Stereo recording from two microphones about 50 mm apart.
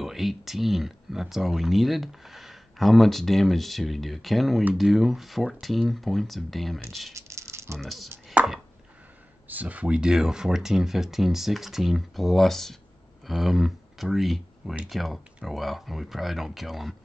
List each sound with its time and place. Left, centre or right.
0.0 s speech: centre
7.2 s a sound: right
7.8 s speech: centre
8.4 s chopping: right
9.5 s speech: right
9.9 s speech: centre